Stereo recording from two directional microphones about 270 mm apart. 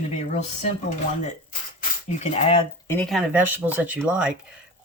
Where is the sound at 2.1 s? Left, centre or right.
Left.